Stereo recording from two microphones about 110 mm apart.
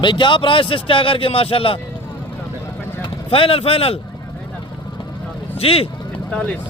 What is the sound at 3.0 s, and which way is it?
Speech, 55° left (ahead or behind).